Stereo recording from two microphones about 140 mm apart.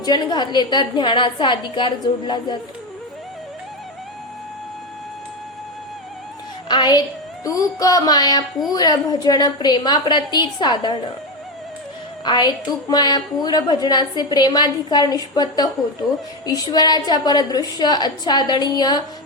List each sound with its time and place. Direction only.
0.0 s a woman's voice: 30° left (ahead or behind)
6.7 s a woman's voice: 30° left (ahead or behind)
12.2 s a woman's voice: 30° left (ahead or behind)